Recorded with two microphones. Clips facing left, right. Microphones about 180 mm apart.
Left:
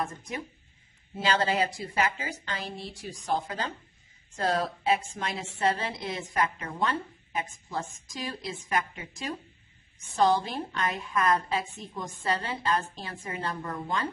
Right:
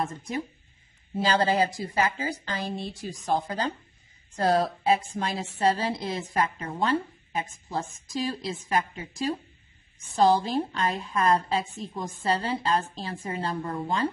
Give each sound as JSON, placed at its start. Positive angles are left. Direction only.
{"t": 1.1, "sound": "a woman's voice", "side_deg": -35}
{"t": 3.3, "sound": "a woman's voice", "side_deg": -35}